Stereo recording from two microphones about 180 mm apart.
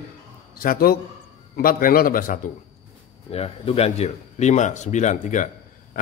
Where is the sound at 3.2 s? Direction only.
30° left (ahead or behind).